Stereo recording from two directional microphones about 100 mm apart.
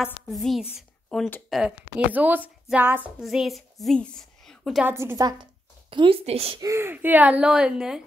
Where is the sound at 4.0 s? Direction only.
10° left (ahead or behind).